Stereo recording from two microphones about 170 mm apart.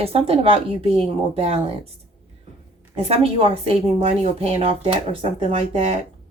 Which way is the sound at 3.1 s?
35° right (ahead or behind).